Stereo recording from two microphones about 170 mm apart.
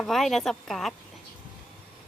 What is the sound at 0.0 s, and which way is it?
Speech, centre (ahead or behind).